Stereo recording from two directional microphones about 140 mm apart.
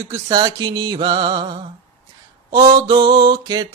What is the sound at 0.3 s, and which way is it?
Mantra, 35° right (ahead or behind).